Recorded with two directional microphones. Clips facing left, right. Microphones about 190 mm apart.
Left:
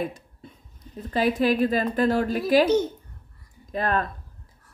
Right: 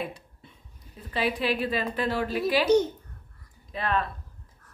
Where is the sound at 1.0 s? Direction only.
45° left (ahead or behind).